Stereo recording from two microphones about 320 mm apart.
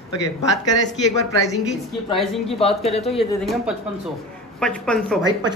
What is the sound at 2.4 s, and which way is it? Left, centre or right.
Speech, centre.